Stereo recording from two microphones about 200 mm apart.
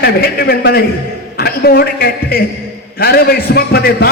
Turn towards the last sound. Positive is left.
turn(degrees=50)  # may be behind; listen again after turning